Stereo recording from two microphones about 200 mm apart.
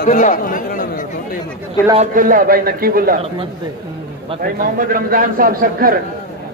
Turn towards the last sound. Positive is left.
turn(degrees=-45)  # may be behind; listen again after turning